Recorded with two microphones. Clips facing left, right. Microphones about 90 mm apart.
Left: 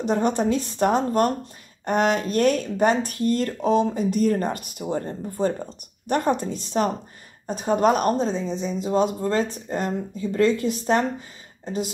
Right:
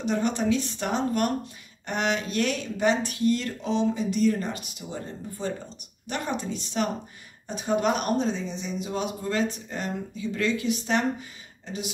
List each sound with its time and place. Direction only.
0.0 s a woman's voice: 40° left (ahead or behind)